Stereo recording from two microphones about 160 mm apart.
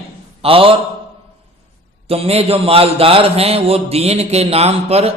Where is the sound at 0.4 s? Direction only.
35° right (ahead or behind).